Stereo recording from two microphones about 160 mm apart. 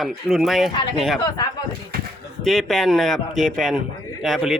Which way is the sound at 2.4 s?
Centre (ahead or behind).